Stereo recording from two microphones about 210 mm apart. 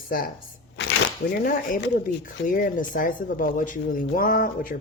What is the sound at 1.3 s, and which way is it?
Speech, 45° left (ahead or behind).